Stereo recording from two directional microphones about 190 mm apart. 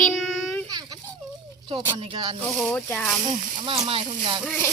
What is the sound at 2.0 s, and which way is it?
Speech, 25° right (ahead or behind).